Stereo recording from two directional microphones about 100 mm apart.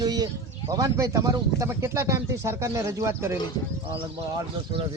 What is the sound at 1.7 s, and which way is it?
Speech, 30° right (ahead or behind).